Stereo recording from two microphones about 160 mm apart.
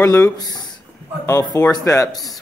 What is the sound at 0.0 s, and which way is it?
Speech, 20° left (ahead or behind).